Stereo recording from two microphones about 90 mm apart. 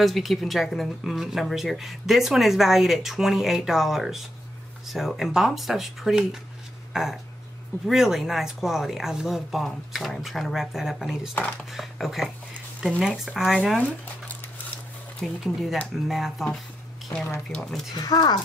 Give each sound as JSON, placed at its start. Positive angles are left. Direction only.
{"t": 0.0, "sound": "speech", "side_deg": 0}
{"t": 13.7, "sound": "a sound", "side_deg": 15}
{"t": 15.1, "sound": "speech", "side_deg": 0}
{"t": 17.9, "sound": "speech", "side_deg": 50}